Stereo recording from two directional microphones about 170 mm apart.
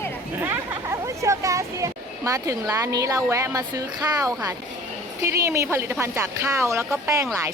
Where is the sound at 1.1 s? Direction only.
15° right (ahead or behind).